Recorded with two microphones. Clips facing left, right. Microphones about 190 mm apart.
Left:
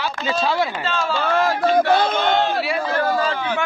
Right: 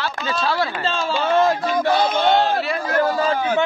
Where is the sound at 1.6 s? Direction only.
55° left (ahead or behind).